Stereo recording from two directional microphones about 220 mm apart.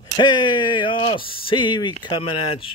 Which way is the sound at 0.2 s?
20° left (ahead or behind).